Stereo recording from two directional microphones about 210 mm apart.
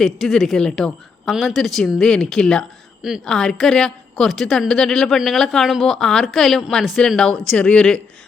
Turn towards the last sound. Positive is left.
turn(degrees=5)  # may be behind; listen again after turning